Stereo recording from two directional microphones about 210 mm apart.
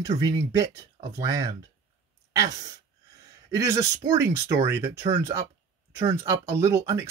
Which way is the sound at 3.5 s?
15° right (ahead or behind).